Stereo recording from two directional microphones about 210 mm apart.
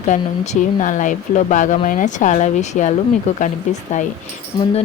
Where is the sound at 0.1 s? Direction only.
35° left (ahead or behind).